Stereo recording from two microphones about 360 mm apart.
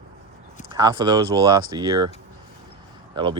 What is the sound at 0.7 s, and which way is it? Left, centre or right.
Speech, centre.